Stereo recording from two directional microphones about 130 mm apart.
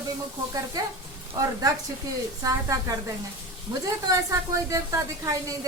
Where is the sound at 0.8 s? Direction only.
30° right (ahead or behind).